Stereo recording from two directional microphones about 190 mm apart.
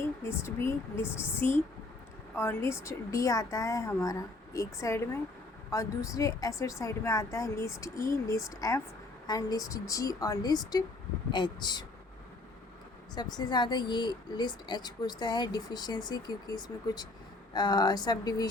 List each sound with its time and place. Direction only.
0.2 s a woman's voice: 15° left (ahead or behind)
13.1 s speech: 20° left (ahead or behind)